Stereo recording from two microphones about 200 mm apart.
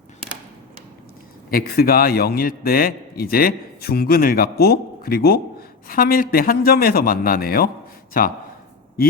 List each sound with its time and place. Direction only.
1.5 s a man's voice: 45° left (ahead or behind)